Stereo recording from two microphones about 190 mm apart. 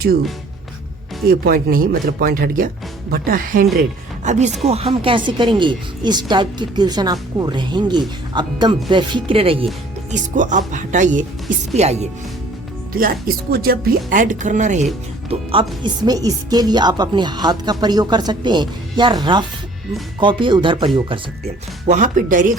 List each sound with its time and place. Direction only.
1.3 s speech: 50° right (ahead or behind); by 9.6 s 30° right (ahead or behind)
10.1 s speech: 40° right (ahead or behind)
12.9 s speech: 50° right (ahead or behind)
15.8 s speech: 20° right (ahead or behind); by 22.5 s 45° right (ahead or behind)